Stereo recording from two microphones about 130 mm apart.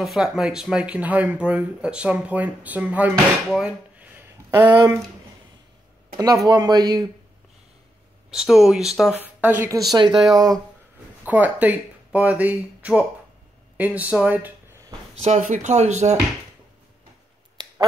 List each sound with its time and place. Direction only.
0.0 s speech: 5° right (ahead or behind)
3.5 s a sound: 10° right (ahead or behind)
6.1 s speech: 30° right (ahead or behind)
8.3 s speech: 5° right (ahead or behind)
9.1 s speech: 15° right (ahead or behind)
9.8 s speech: 30° right (ahead or behind)
11.2 s speech: 10° right (ahead or behind)
15.2 s speech: 70° right (ahead or behind)
17.6 s finger snapping: 30° right (ahead or behind)